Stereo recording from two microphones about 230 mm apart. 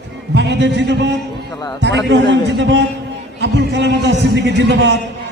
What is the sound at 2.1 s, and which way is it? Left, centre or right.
Speech, right.